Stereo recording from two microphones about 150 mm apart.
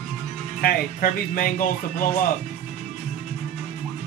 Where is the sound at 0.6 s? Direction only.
80° left.